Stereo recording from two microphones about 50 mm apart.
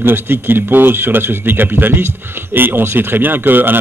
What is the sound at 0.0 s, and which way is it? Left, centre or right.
Speech, right.